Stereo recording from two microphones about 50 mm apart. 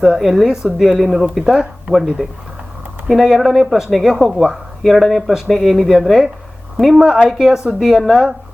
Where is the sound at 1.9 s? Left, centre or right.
Right.